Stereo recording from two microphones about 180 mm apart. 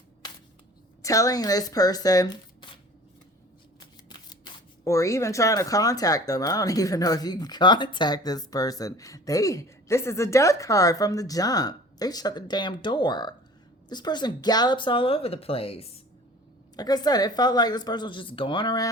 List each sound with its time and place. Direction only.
1.0 s speech: 20° left (ahead or behind)
3.8 s speech: 25° left (ahead or behind)
16.7 s speech: 20° left (ahead or behind)